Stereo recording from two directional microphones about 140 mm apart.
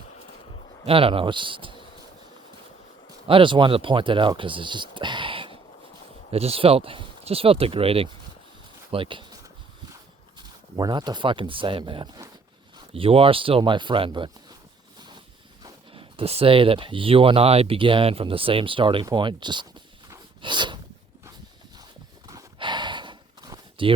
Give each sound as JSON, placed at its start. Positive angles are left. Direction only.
{"t": 0.9, "sound": "speech", "side_deg": -40}
{"t": 3.2, "sound": "speech", "side_deg": -35}
{"t": 10.8, "sound": "speech", "side_deg": -30}
{"t": 12.9, "sound": "speech", "side_deg": -45}
{"t": 15.9, "sound": "speech", "side_deg": -40}
{"t": 19.0, "sound": "a sound", "side_deg": -35}
{"t": 22.3, "sound": "a sound", "side_deg": -30}